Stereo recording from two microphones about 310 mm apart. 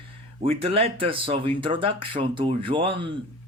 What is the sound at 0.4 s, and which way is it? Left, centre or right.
Speech, centre.